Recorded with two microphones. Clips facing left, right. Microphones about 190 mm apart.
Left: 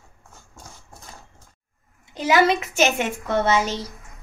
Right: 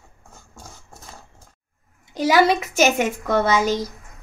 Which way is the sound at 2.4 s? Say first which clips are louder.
Right 2 dB; 10° right (ahead or behind).